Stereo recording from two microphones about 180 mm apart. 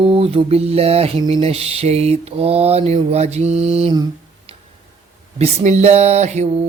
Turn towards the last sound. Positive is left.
turn(degrees=-40)  # may be behind; listen again after turning